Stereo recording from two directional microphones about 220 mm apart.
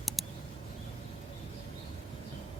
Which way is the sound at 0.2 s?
Centre (ahead or behind).